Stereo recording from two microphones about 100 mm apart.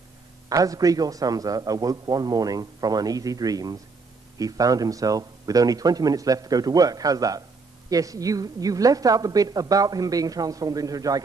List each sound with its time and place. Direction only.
0.5 s a man's voice: 35° right (ahead or behind)